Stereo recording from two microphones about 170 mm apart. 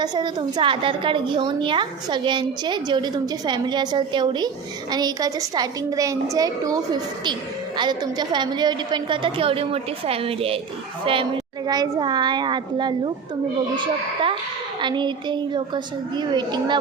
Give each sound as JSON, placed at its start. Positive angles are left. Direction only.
{"t": 0.0, "sound": "a woman's voice", "side_deg": -25}